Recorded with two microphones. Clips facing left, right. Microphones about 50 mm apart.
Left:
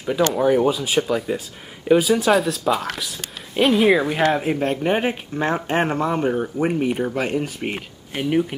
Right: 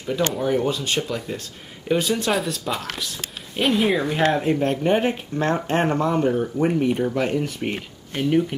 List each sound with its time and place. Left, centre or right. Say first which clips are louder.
0.4 s speech: left 5 dB; centre
7.1 s speech: even; centre